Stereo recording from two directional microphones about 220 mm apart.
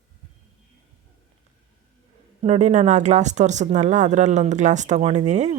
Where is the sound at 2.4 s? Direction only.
30° right (ahead or behind).